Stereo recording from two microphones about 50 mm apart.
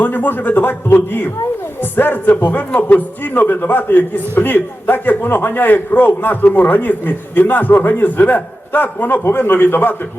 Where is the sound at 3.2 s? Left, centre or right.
Left.